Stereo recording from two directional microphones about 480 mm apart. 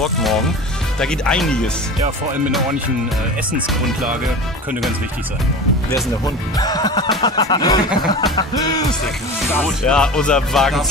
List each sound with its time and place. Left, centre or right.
0.0 s speech: centre
5.9 s speech: centre